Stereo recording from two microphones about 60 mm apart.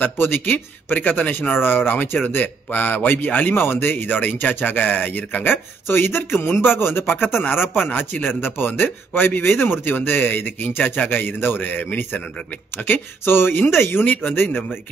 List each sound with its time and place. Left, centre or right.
0.0 s speech: left